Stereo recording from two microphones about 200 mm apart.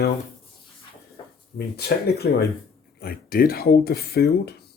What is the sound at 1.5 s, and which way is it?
Speech, 55° left (ahead or behind).